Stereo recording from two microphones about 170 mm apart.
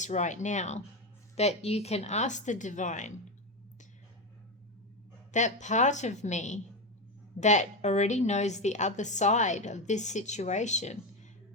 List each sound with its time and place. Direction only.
0.0 s a woman's voice: 45° left (ahead or behind)
5.3 s a woman's voice: 45° left (ahead or behind)